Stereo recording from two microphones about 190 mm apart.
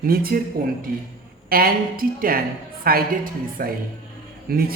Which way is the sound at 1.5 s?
50° right (ahead or behind).